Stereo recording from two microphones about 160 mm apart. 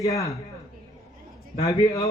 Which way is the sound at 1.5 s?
20° left (ahead or behind).